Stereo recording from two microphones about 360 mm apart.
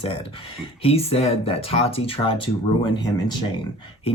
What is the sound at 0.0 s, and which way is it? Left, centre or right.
Speech, centre.